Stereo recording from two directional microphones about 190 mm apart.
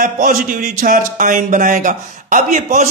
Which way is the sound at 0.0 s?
45° right (ahead or behind).